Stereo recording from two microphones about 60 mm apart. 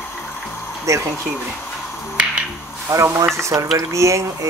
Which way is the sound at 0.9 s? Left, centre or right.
Right.